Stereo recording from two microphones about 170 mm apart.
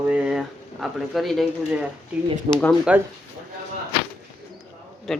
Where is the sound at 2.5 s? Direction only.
35° right (ahead or behind).